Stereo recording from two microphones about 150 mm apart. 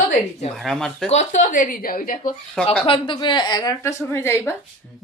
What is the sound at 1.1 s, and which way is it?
A woman's voice, 55° left (ahead or behind).